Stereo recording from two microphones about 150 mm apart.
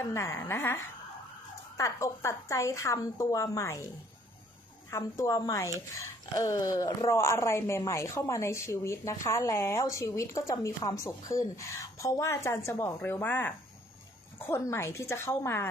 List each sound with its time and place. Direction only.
0.1 s a woman's voice: 20° left (ahead or behind)
4.9 s a woman's voice: 20° left (ahead or behind)